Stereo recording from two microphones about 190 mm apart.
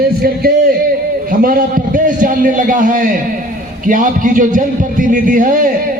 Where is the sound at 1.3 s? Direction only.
45° right (ahead or behind).